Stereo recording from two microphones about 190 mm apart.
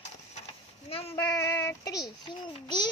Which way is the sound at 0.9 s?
30° left (ahead or behind).